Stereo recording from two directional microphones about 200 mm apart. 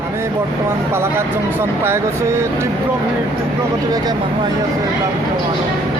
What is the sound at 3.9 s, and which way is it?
Speech, 20° right (ahead or behind).